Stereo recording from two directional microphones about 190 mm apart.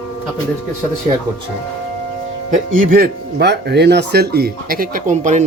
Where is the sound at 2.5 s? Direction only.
50° right (ahead or behind).